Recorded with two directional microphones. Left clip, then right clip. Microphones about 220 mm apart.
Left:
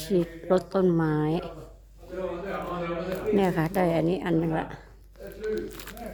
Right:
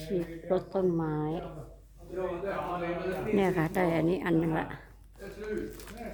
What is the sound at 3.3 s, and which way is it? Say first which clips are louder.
Speech: left 3 dB; 10° left (ahead or behind).